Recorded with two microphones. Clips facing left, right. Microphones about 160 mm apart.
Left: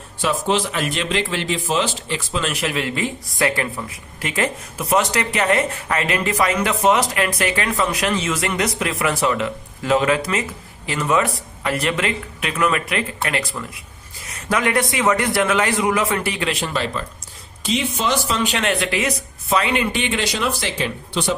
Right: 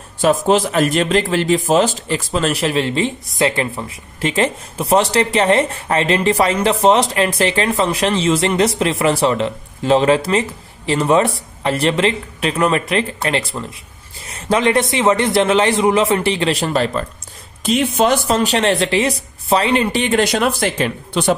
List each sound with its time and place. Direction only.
0.2 s a man's voice: 45° right (ahead or behind)